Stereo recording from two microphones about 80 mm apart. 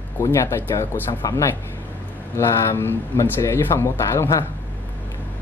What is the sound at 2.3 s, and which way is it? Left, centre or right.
Speech, left.